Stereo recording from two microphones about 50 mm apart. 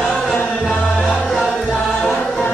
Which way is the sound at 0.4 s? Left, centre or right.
Left.